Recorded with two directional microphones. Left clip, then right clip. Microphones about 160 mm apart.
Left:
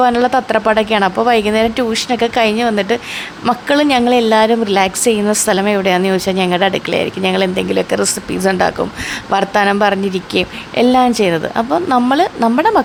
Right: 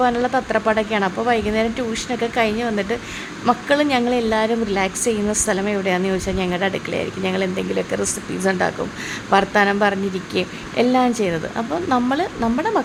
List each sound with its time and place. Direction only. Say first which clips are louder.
0.0 s a woman's voice: left 6 dB; 25° left (ahead or behind)